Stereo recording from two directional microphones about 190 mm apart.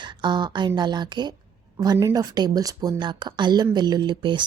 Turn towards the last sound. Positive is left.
turn(degrees=-25)  # may be behind; listen again after turning